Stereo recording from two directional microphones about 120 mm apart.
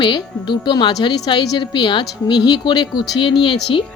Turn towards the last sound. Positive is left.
turn(degrees=45)  # may be behind; listen again after turning